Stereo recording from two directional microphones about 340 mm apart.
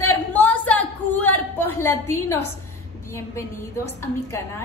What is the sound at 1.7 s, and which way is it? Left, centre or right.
Speech, centre.